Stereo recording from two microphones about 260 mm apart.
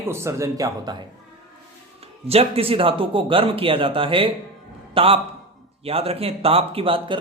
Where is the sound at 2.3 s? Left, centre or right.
Right.